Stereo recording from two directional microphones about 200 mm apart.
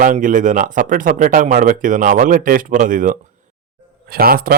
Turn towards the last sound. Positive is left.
turn(degrees=-50)  # may be behind; listen again after turning